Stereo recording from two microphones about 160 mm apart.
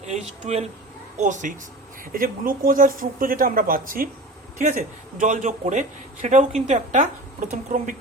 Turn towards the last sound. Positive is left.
turn(degrees=-55)  # may be behind; listen again after turning